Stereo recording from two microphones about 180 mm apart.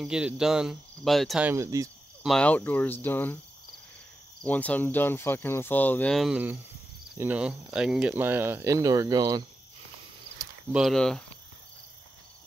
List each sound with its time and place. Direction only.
0.0 s speech: 5° right (ahead or behind)
1.5 s speech: 15° right (ahead or behind)
2.2 s speech: 5° left (ahead or behind)
4.4 s speech: 10° left (ahead or behind); by 9.4 s 20° right (ahead or behind)
10.7 s speech: centre (ahead or behind)